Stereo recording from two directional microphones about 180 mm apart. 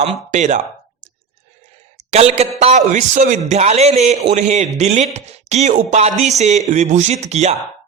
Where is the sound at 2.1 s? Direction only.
35° right (ahead or behind).